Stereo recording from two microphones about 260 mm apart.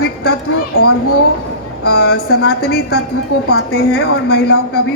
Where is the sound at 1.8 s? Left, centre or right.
Left.